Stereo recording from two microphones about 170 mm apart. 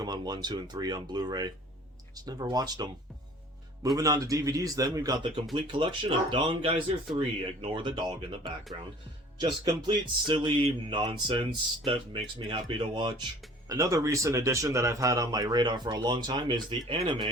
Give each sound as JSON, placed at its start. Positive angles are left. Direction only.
{"t": 0.0, "sound": "speech", "side_deg": -25}
{"t": 3.9, "sound": "speech", "side_deg": -20}